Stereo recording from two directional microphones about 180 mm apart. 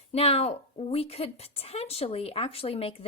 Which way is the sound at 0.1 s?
35° left (ahead or behind).